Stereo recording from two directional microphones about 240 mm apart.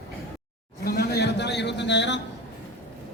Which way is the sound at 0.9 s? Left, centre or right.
Left.